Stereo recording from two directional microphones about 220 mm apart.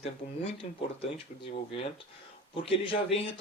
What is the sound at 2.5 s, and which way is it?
Speech, 25° left (ahead or behind).